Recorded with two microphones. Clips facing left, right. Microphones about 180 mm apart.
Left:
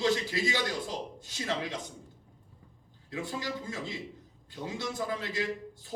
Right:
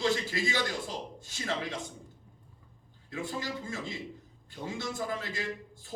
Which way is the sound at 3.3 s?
20° left (ahead or behind).